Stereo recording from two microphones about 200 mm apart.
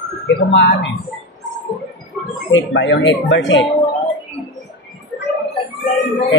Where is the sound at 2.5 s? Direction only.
70° left (ahead or behind).